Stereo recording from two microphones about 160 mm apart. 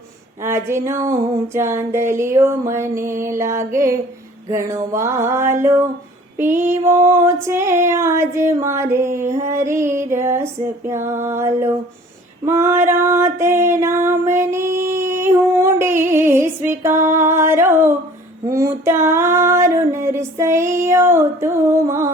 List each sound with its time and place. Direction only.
0.4 s music: 15° right (ahead or behind)